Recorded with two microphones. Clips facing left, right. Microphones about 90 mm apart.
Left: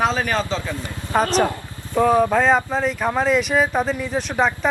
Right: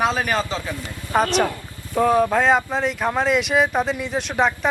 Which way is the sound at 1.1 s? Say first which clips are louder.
Left 1 dB; 35° left (ahead or behind).